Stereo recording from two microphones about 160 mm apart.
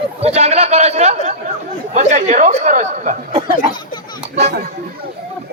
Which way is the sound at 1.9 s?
50° right (ahead or behind).